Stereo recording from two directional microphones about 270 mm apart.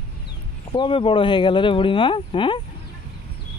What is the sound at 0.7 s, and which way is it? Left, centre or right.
Speech, centre.